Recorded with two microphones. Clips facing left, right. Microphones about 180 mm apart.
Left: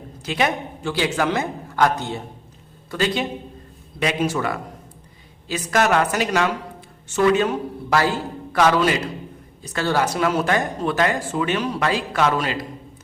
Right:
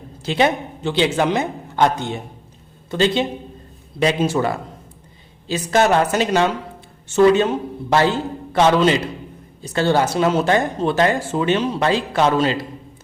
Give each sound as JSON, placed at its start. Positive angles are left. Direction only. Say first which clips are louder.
{"t": 0.2, "sound": "a man's voice", "louder": "right 4 dB", "side_deg": -30}